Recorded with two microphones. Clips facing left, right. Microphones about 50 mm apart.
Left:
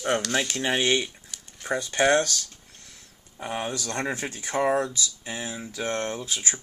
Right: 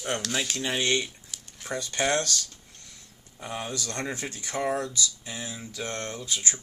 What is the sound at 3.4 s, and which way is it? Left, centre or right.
Speech, left.